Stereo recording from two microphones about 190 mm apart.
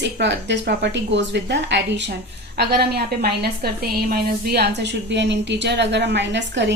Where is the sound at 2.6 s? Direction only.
55° right (ahead or behind).